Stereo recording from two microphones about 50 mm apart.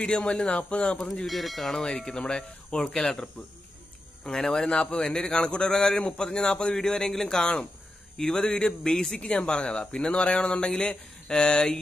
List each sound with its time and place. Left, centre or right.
0.0 s speech: centre
1.2 s speech: centre
1.9 s a man's voice: centre
4.6 s speech: left
5.0 s a man's voice: centre